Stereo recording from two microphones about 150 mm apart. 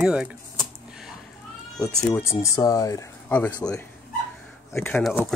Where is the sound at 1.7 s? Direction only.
5° left (ahead or behind).